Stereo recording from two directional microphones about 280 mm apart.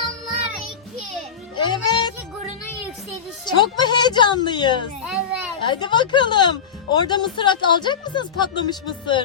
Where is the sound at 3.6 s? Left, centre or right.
Centre.